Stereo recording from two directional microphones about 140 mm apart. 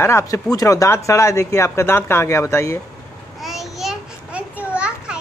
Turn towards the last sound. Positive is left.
turn(degrees=-10)  # may be behind; listen again after turning